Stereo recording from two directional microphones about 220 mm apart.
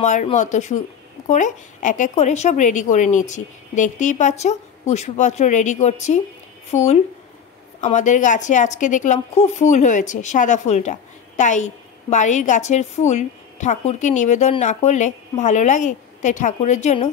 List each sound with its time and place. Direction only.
0.0 s a woman's voice: 35° left (ahead or behind)